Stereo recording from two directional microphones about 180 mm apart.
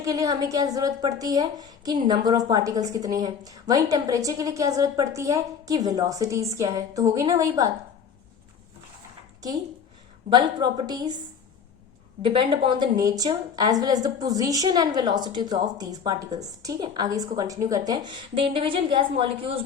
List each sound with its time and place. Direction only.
0.0 s a woman's voice: 20° right (ahead or behind)
10.2 s a woman's voice: 25° right (ahead or behind)
12.2 s a woman's voice: 30° right (ahead or behind)